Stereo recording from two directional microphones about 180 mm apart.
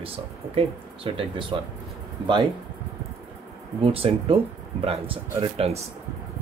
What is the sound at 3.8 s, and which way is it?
Speech, 30° right (ahead or behind).